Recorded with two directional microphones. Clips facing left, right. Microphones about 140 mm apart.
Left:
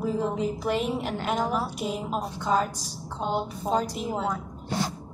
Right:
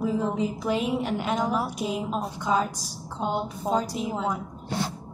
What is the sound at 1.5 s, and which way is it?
A woman's voice, 10° right (ahead or behind).